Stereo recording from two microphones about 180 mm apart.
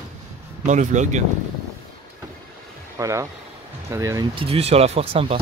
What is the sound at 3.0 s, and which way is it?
Speech, 15° right (ahead or behind).